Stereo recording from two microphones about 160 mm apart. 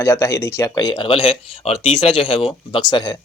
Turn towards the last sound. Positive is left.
turn(degrees=25)  # may be behind; listen again after turning